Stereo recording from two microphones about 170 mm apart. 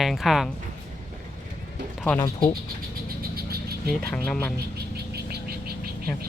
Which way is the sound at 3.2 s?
65° right (ahead or behind).